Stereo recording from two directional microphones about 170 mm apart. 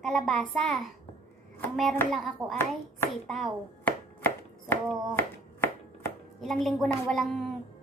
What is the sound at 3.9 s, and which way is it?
Chopping, 10° left (ahead or behind).